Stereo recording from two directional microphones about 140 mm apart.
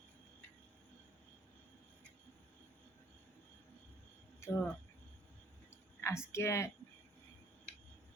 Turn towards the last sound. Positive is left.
turn(degrees=20)  # may be behind; listen again after turning